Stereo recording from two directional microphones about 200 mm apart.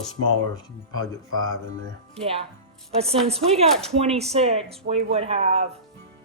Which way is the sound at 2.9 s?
30° right (ahead or behind).